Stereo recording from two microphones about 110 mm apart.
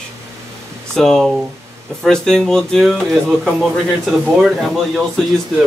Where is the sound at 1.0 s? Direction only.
5° left (ahead or behind).